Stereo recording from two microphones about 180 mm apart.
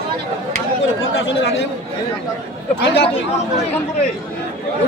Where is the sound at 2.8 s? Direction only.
70° left (ahead or behind).